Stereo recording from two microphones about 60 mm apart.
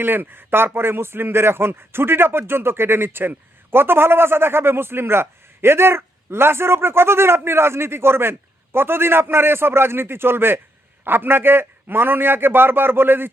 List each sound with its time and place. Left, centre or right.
0.0 s speech: right